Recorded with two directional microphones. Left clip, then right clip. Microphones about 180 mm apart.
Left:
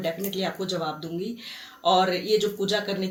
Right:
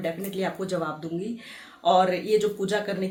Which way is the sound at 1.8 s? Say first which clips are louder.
Right 1 dB; 10° right (ahead or behind).